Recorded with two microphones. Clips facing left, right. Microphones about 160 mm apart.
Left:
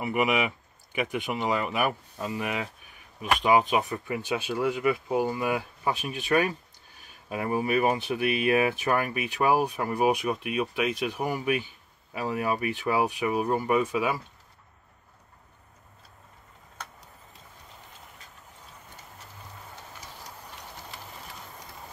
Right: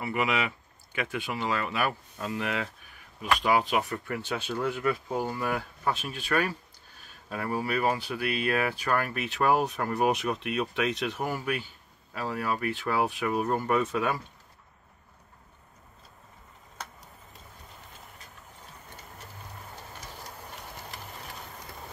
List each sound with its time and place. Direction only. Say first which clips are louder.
0.0 s speech: left 3 dB; 15° left (ahead or behind)